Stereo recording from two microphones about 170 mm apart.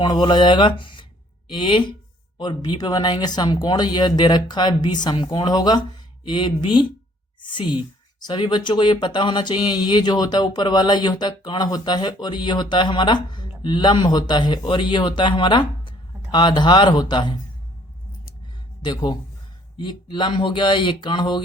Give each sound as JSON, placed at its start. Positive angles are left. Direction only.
{"t": 0.0, "sound": "speech", "side_deg": 25}
{"t": 18.8, "sound": "speech", "side_deg": 25}